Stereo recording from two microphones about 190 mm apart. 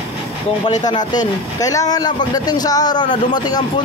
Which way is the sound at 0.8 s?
20° left (ahead or behind).